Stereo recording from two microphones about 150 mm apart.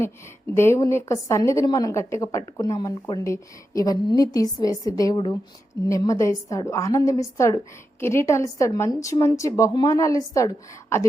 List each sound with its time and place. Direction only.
0.5 s a woman's voice: 15° left (ahead or behind)